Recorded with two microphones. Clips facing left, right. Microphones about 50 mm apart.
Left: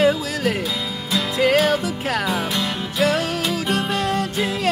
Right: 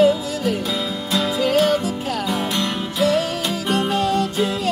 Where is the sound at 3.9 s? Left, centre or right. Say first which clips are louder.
Right 2 dB; left.